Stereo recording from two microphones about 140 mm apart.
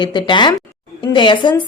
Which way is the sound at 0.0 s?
35° left (ahead or behind).